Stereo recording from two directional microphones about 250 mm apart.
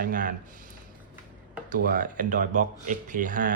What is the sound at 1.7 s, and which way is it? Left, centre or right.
Speech, right.